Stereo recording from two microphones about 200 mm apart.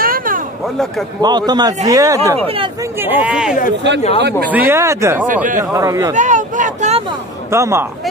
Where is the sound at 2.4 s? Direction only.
25° right (ahead or behind).